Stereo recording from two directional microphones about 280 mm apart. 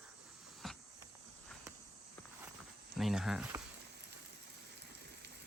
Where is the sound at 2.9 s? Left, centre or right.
Centre.